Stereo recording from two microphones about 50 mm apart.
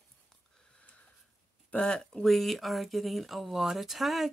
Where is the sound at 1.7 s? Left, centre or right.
Centre.